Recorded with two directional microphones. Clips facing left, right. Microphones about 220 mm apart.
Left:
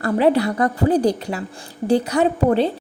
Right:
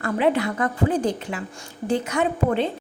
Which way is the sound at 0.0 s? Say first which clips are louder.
Left 4 dB; 35° left (ahead or behind).